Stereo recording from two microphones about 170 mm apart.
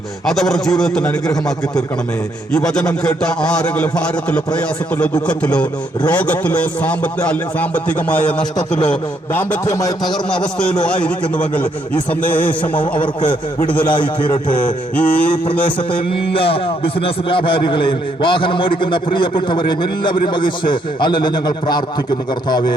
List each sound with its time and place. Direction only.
0.3 s a man's voice: 5° left (ahead or behind)
2.5 s a man's voice: 5° left (ahead or behind)
8.5 s a man's voice: 25° left (ahead or behind)
8.9 s a man's voice: 10° left (ahead or behind)
10.0 s a man's voice: 5° left (ahead or behind)
13.0 s a man's voice: 30° left (ahead or behind)
14.6 s a man's voice: 10° left (ahead or behind)
16.3 s a man's voice: 30° left (ahead or behind)